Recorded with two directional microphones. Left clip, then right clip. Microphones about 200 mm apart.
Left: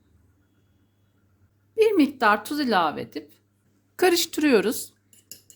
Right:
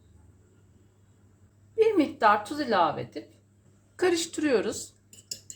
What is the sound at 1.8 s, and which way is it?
A woman's voice, 55° left (ahead or behind).